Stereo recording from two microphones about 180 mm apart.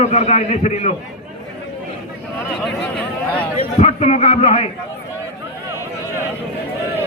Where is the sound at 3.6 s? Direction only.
35° left (ahead or behind).